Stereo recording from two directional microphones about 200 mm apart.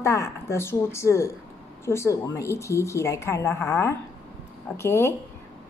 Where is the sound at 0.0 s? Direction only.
15° left (ahead or behind).